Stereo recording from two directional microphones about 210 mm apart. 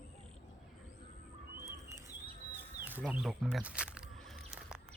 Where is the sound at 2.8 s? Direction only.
10° right (ahead or behind).